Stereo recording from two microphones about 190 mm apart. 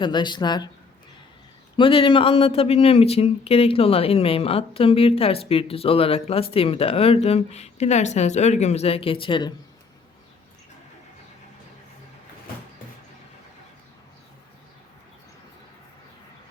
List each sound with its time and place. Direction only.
0.0 s speech: 25° left (ahead or behind)
1.7 s speech: 25° left (ahead or behind)